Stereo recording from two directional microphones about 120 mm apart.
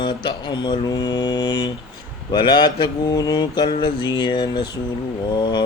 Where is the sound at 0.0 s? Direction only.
40° left (ahead or behind).